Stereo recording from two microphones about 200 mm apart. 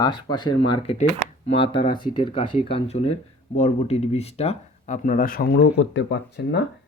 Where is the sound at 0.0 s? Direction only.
20° left (ahead or behind).